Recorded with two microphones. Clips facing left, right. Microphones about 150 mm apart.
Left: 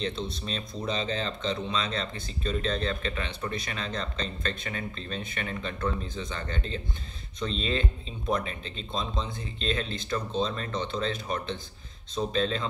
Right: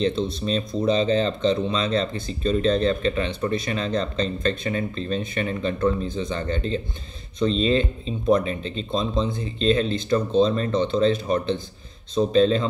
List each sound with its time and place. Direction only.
0.0 s speech: 30° right (ahead or behind)